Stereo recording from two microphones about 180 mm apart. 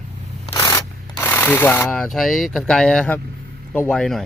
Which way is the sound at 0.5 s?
15° left (ahead or behind).